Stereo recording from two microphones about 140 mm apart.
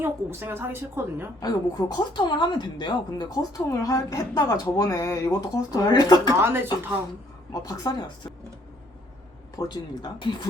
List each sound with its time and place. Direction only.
0.0 s a woman's voice: 15° right (ahead or behind)
1.4 s a woman's voice: 30° left (ahead or behind)
6.4 s a woman's voice: 15° right (ahead or behind)
7.5 s a woman's voice: 25° left (ahead or behind)
9.6 s a woman's voice: 30° left (ahead or behind)